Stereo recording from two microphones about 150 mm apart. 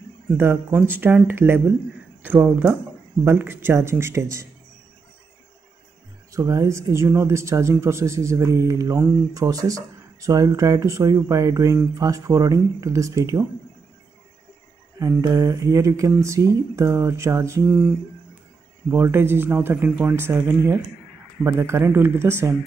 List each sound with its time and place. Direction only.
0.4 s speech: 15° right (ahead or behind)
6.3 s speech: 20° right (ahead or behind)
15.0 s speech: 20° right (ahead or behind)